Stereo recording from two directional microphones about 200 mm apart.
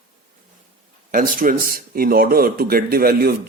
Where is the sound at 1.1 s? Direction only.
45° right (ahead or behind).